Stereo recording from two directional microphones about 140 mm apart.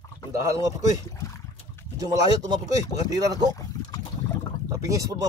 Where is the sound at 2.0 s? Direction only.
25° right (ahead or behind).